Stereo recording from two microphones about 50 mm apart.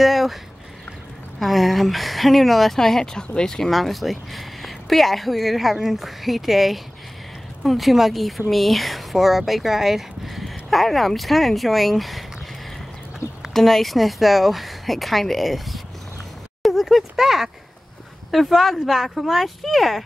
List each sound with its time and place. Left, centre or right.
0.0 s speech: centre
1.4 s speech: centre
3.7 s speech: centre
13.5 s speech: centre
16.6 s a sound: centre
18.3 s speech: centre